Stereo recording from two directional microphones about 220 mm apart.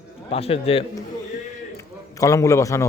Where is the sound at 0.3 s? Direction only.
25° left (ahead or behind).